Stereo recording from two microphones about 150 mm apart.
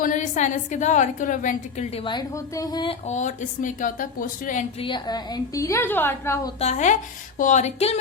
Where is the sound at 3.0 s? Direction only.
50° left (ahead or behind).